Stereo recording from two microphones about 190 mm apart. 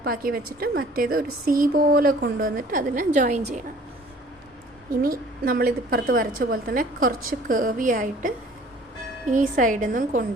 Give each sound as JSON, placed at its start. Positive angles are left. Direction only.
{"t": 0.0, "sound": "a woman's voice", "side_deg": -50}
{"t": 5.0, "sound": "a woman's voice", "side_deg": -50}
{"t": 9.3, "sound": "a woman's voice", "side_deg": -45}